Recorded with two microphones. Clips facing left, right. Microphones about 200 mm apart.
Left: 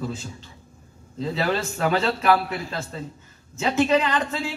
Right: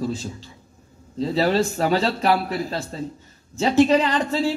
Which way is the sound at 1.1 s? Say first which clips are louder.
Right 5 dB; 35° right (ahead or behind).